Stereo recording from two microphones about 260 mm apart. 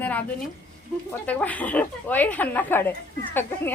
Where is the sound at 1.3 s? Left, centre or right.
Centre.